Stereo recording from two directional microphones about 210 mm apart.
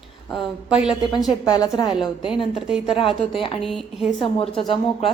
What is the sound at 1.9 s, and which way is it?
A woman's voice, 5° right (ahead or behind).